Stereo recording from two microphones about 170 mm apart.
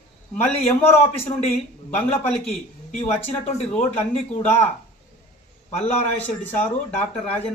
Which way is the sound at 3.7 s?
35° left (ahead or behind).